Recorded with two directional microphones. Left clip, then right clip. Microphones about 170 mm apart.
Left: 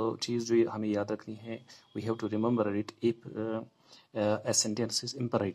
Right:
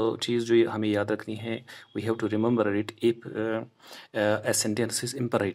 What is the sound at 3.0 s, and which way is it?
Speech, 30° right (ahead or behind).